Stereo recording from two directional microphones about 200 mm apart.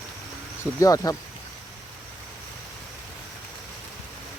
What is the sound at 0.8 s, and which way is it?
Speech, 15° left (ahead or behind).